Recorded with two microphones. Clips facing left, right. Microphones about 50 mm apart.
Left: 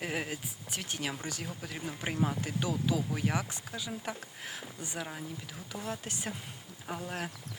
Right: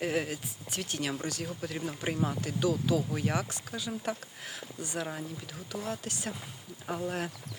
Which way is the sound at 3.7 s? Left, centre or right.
Centre.